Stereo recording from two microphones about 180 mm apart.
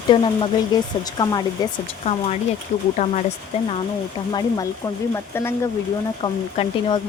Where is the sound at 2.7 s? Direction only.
35° left (ahead or behind).